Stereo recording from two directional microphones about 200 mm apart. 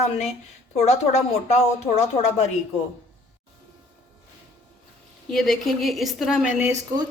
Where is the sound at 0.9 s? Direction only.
35° left (ahead or behind).